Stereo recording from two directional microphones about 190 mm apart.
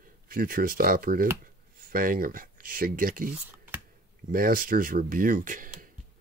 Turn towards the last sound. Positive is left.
turn(degrees=-45)  # may be behind; listen again after turning